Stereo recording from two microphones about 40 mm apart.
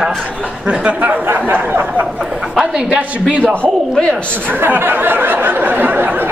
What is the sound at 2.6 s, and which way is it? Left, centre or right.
Speech, centre.